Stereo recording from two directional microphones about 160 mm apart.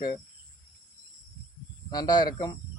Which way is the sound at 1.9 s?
25° left (ahead or behind).